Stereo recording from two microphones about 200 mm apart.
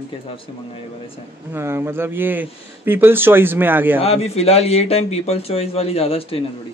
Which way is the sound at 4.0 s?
30° left (ahead or behind).